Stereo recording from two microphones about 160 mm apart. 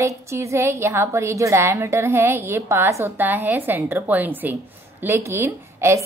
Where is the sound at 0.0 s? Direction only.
15° right (ahead or behind).